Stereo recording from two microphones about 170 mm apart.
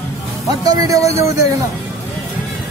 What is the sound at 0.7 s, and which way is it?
Speech, 20° right (ahead or behind).